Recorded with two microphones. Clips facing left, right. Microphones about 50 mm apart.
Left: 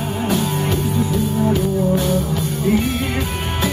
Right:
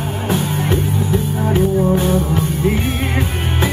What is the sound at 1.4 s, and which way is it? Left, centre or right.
Music, right.